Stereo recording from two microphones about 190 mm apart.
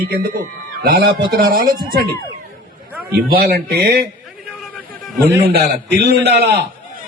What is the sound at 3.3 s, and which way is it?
Speech, 55° right (ahead or behind).